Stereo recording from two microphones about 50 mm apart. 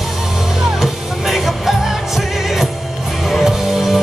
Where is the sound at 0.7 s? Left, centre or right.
Centre.